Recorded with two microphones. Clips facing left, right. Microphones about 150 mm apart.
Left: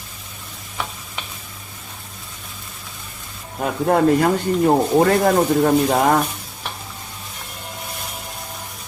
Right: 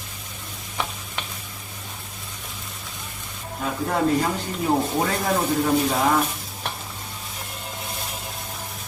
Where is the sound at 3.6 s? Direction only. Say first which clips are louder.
Left 6 dB; 55° left (ahead or behind).